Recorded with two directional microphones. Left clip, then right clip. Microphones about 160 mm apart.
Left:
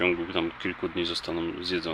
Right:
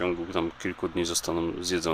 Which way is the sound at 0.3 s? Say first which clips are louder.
Even; 20° right (ahead or behind).